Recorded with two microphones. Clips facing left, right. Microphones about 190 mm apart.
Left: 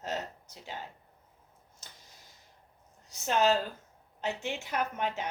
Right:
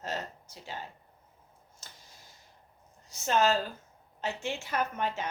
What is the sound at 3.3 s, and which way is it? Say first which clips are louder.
A woman's voice: even; 15° left (ahead or behind).